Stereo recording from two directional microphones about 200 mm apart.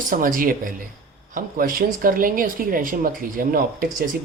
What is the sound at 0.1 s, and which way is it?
Speech, 45° right (ahead or behind).